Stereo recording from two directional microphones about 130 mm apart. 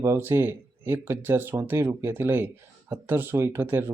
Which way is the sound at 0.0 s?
20° right (ahead or behind).